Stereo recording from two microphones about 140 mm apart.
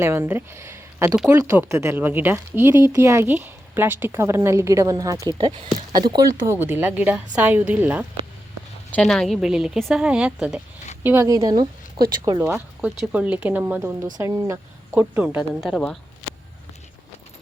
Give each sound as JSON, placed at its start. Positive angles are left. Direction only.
{"t": 0.0, "sound": "speech", "side_deg": -15}
{"t": 5.4, "sound": "speech", "side_deg": -40}
{"t": 6.5, "sound": "a woman's voice", "side_deg": -15}
{"t": 8.9, "sound": "a woman's voice", "side_deg": 5}
{"t": 11.0, "sound": "speech", "side_deg": -20}
{"t": 11.9, "sound": "speech", "side_deg": -90}
{"t": 12.4, "sound": "speech", "side_deg": -20}
{"t": 12.8, "sound": "a woman's voice", "side_deg": -5}
{"t": 14.2, "sound": "a woman's voice", "side_deg": -20}
{"t": 15.6, "sound": "a woman's voice", "side_deg": 0}